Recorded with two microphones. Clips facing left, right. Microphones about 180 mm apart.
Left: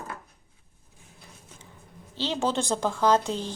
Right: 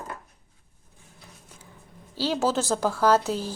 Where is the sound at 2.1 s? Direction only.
10° right (ahead or behind).